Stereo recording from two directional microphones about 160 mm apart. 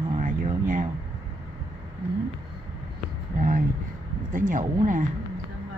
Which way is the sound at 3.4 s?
55° right (ahead or behind).